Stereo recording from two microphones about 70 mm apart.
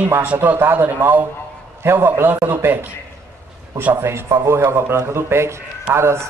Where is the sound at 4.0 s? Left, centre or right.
Right.